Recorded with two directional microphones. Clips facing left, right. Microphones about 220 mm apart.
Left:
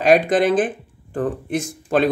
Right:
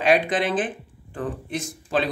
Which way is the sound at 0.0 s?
45° left (ahead or behind).